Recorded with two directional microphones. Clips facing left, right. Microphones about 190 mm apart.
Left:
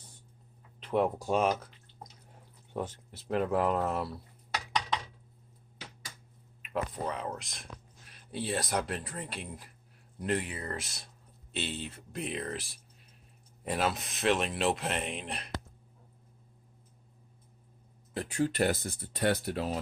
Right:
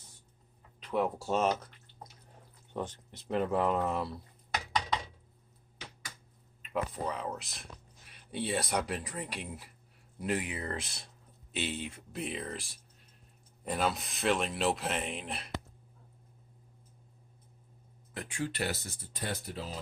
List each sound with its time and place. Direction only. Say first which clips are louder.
0.8 s a sound: left 3 dB; 25° left (ahead or behind)
1.0 s speech: even; 10° left (ahead or behind)
2.7 s speech: left 1 dB; 10° left (ahead or behind)
6.6 s speech: even; centre (ahead or behind)
10.6 s speech: right 1 dB; 25° right (ahead or behind)
11.5 s speech: right 1 dB; 10° right (ahead or behind)
13.7 s speech: left 1 dB; 5° left (ahead or behind)
18.1 s speech: left 6 dB; 35° left (ahead or behind); by 19.8 s 65° left (ahead or behind)